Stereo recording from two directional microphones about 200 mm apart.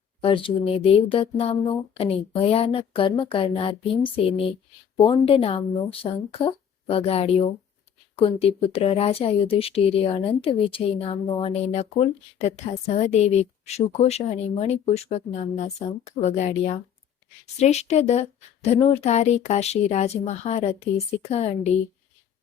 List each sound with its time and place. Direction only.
0.2 s speech: 25° left (ahead or behind)